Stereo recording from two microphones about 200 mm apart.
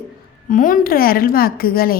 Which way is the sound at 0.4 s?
40° left (ahead or behind).